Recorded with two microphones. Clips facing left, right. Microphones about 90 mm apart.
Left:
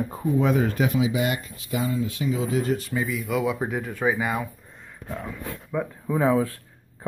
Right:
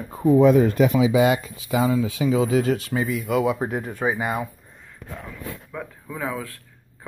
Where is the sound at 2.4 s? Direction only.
90° right.